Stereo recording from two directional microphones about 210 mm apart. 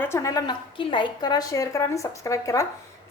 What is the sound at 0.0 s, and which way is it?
Speech, 15° left (ahead or behind).